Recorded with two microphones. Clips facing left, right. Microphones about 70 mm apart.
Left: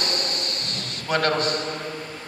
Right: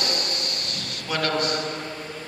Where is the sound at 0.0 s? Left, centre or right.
Left.